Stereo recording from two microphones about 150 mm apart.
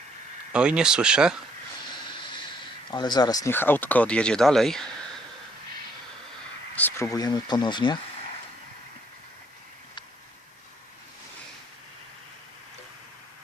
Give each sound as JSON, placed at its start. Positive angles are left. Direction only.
{"t": 0.5, "sound": "speech", "side_deg": -5}
{"t": 2.9, "sound": "speech", "side_deg": 30}
{"t": 3.5, "sound": "speech", "side_deg": 15}
{"t": 6.7, "sound": "a sound", "side_deg": 10}
{"t": 7.1, "sound": "speech", "side_deg": 25}